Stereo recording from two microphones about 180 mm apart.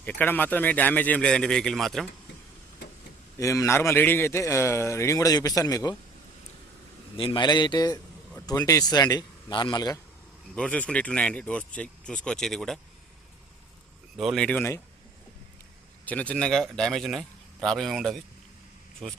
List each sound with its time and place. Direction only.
0.0 s a man's voice: 10° left (ahead or behind)
3.3 s a man's voice: 20° left (ahead or behind)
7.2 s speech: 25° left (ahead or behind)
10.5 s speech: 5° left (ahead or behind)
14.2 s speech: centre (ahead or behind)
16.0 s speech: 10° left (ahead or behind)